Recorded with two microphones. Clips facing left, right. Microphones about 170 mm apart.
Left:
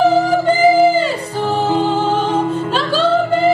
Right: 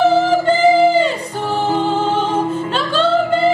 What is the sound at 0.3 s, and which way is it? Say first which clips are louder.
Music: even; 10° left (ahead or behind).